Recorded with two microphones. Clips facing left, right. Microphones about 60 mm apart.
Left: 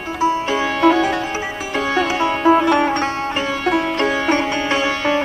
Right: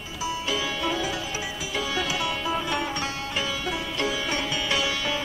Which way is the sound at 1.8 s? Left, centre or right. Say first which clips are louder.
Left 10 dB; left.